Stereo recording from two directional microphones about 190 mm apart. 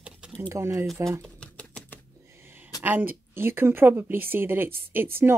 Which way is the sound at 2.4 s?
10° right (ahead or behind).